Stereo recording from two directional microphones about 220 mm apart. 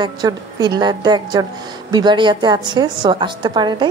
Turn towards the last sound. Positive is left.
turn(degrees=-20)  # may be behind; listen again after turning